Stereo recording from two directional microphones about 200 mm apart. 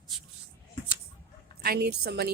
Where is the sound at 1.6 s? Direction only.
50° right (ahead or behind).